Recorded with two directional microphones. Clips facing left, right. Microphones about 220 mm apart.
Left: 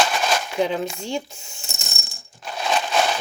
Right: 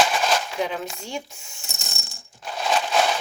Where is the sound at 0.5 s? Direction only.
30° left (ahead or behind).